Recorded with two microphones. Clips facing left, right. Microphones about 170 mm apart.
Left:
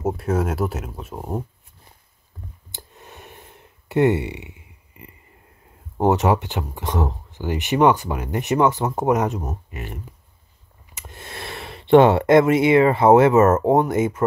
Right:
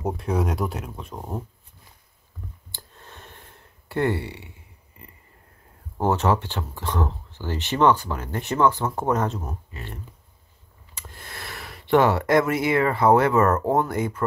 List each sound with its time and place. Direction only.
0.0 s speech: centre (ahead or behind)
2.7 s a sound: 15° left (ahead or behind)
5.9 s speech: 15° left (ahead or behind)
11.0 s speech: 20° left (ahead or behind)